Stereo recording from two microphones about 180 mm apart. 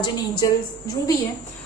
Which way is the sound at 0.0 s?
25° left (ahead or behind).